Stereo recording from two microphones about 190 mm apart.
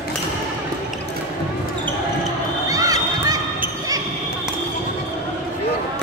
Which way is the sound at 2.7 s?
20° right (ahead or behind).